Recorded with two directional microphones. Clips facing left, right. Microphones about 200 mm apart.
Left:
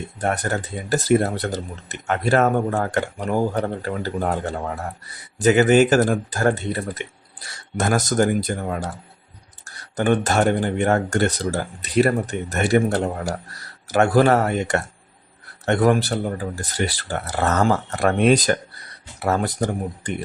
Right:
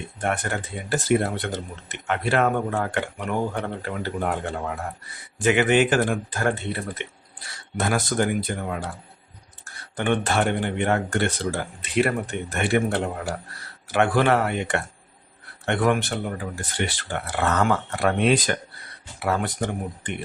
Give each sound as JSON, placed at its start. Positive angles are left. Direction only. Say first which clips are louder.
{"t": 0.2, "sound": "speech", "louder": "left 3 dB", "side_deg": 40}
{"t": 9.9, "sound": "speech", "louder": "left 4 dB", "side_deg": 40}